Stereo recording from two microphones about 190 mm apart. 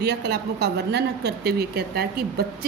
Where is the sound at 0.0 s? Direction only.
60° right (ahead or behind).